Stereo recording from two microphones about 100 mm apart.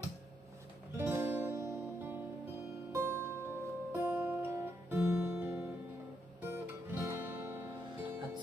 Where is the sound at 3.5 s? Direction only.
30° left (ahead or behind).